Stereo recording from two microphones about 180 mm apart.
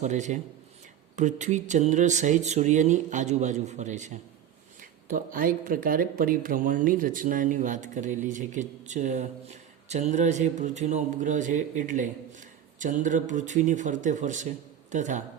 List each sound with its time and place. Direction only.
0.0 s speech: 40° right (ahead or behind)